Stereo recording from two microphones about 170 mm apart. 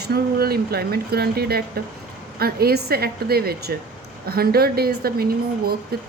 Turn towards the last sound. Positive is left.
turn(degrees=-65)  # may be behind; listen again after turning